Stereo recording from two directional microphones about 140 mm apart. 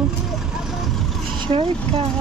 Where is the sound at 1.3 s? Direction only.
35° right (ahead or behind).